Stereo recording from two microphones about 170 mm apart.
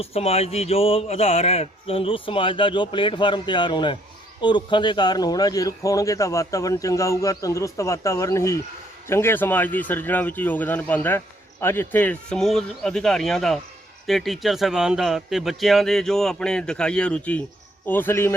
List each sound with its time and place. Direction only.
0.0 s a man's voice: 35° left (ahead or behind); by 18.3 s 15° left (ahead or behind)